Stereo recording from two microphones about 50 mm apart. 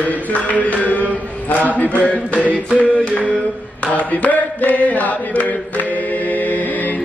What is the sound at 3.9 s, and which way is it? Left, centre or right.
Chant, left.